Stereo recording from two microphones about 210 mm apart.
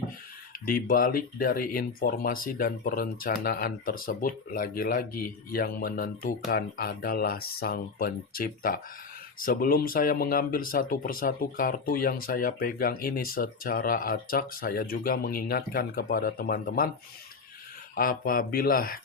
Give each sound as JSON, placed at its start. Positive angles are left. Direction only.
{"t": 0.7, "sound": "speech", "side_deg": 40}
{"t": 17.9, "sound": "speech", "side_deg": 40}